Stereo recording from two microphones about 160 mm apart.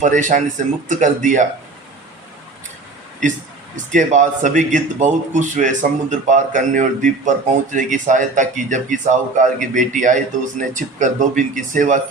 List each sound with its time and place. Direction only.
0.0 s speech: 50° right (ahead or behind)
3.9 s speech: 50° right (ahead or behind)